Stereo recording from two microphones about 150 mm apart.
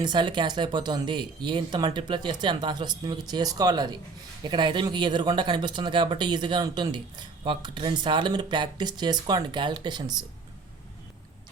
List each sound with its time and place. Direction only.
0.0 s speech: 30° right (ahead or behind)